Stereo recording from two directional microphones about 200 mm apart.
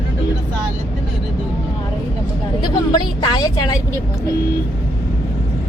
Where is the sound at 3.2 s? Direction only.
20° left (ahead or behind).